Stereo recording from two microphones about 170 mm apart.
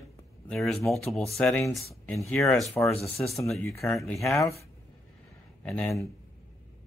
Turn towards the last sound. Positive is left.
turn(degrees=5)  # may be behind; listen again after turning